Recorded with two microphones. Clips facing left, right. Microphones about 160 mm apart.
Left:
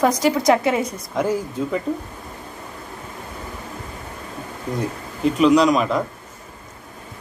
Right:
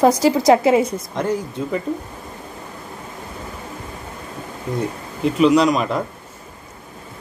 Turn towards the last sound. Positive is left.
turn(degrees=0)  # may be behind; listen again after turning